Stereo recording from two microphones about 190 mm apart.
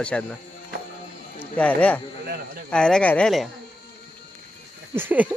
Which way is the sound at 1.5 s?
5° left (ahead or behind).